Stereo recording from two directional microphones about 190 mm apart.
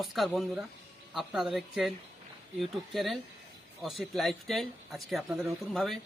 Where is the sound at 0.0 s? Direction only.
Centre (ahead or behind).